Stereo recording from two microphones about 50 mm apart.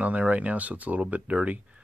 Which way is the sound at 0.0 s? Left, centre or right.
Right.